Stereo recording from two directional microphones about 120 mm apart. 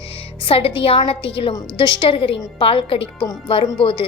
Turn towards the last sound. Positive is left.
turn(degrees=45)  # may be behind; listen again after turning